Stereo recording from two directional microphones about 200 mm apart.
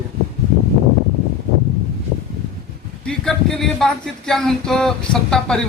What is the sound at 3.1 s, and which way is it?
Speech, 5° left (ahead or behind).